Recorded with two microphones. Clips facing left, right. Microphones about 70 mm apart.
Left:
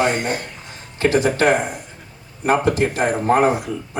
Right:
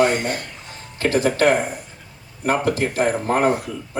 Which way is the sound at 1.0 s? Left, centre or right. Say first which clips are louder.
Left 1 dB; left.